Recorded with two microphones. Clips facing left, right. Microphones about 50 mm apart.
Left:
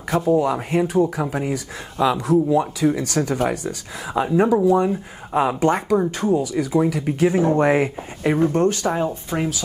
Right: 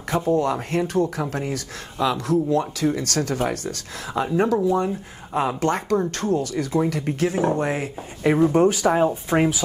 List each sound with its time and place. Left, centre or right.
0.1 s speech: centre
7.5 s speech: left
8.2 s speech: centre
8.5 s speech: centre